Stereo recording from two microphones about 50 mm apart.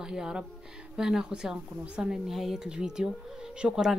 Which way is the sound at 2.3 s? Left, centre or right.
Centre.